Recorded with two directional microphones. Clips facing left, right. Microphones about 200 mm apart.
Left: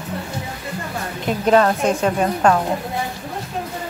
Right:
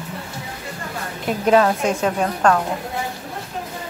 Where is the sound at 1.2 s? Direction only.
5° right (ahead or behind).